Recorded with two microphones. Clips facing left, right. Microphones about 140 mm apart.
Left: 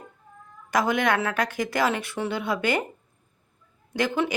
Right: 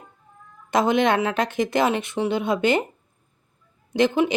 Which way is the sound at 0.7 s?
25° right (ahead or behind).